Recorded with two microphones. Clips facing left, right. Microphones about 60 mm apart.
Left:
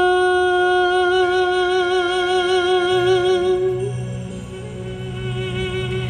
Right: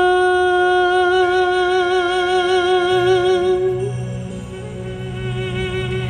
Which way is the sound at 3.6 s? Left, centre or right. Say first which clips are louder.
Right 1 dB; right.